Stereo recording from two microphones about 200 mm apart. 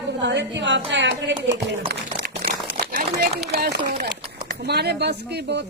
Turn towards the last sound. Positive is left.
turn(degrees=-55)  # may be behind; listen again after turning